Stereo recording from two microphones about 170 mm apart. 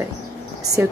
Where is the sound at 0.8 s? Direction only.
10° right (ahead or behind).